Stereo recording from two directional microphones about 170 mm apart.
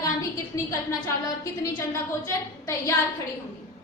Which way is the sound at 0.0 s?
20° left (ahead or behind).